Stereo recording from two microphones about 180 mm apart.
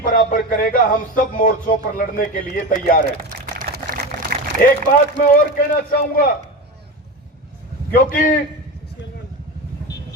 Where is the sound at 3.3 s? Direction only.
50° right (ahead or behind).